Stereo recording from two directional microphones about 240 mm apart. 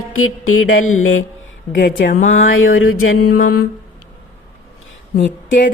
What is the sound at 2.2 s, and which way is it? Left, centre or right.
Speech, left.